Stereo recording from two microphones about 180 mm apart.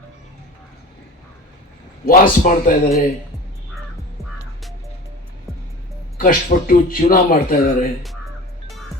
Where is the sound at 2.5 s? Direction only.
45° left (ahead or behind).